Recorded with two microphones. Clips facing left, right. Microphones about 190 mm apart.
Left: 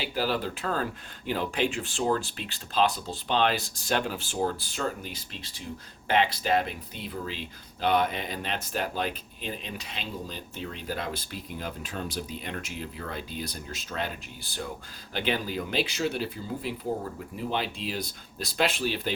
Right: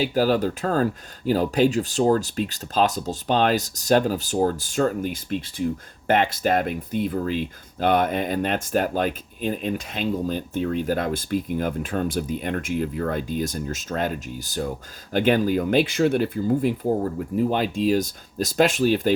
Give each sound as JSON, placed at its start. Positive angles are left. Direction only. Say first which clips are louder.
{"t": 0.0, "sound": "speech", "louder": "right 9 dB", "side_deg": -45}